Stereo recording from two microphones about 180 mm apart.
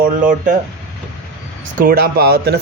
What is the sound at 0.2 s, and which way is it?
Speech, 45° right (ahead or behind).